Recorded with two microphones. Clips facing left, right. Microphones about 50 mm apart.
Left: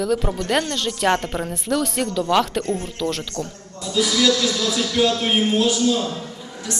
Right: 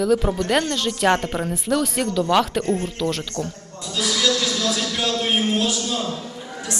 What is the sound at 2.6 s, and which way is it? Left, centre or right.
Speech, right.